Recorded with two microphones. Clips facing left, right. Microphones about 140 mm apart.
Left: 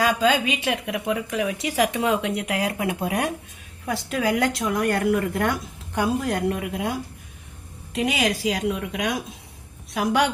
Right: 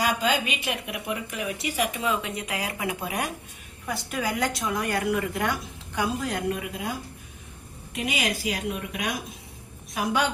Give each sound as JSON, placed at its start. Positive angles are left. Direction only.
{"t": 0.0, "sound": "a woman's voice", "side_deg": 90}
{"t": 7.9, "sound": "a woman's voice", "side_deg": 90}